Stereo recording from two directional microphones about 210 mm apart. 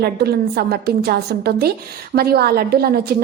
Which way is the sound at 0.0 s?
50° right (ahead or behind).